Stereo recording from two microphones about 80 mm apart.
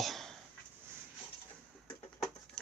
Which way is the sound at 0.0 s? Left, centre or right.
Centre.